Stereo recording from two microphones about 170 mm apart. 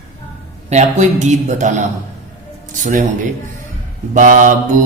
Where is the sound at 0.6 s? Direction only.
45° right (ahead or behind).